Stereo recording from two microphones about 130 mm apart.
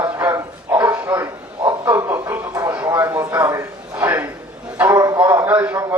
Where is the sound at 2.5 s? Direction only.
30° right (ahead or behind).